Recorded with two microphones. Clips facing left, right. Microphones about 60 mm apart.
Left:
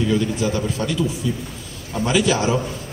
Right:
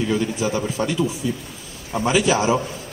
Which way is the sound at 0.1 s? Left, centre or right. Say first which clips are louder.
Left 1 dB; right.